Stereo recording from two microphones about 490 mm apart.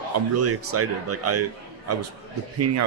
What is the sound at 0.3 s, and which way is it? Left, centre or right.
Speech, right.